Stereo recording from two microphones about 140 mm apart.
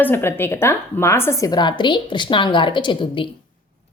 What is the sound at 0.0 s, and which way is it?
A woman's voice, 15° left (ahead or behind).